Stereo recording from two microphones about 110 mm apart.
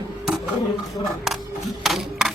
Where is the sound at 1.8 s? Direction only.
Centre (ahead or behind).